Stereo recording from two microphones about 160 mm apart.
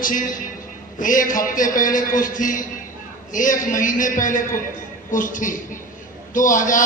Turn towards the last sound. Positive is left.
turn(degrees=55)  # may be behind; listen again after turning